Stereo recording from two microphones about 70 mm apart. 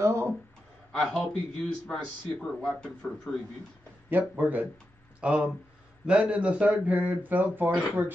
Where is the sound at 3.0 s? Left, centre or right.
Centre.